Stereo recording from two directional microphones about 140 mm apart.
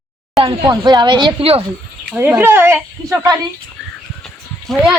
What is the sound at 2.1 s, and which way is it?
Speech, 15° right (ahead or behind).